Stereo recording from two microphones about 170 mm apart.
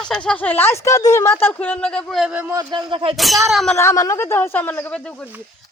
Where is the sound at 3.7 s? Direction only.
15° left (ahead or behind).